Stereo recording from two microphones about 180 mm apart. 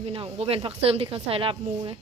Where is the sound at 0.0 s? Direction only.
30° right (ahead or behind).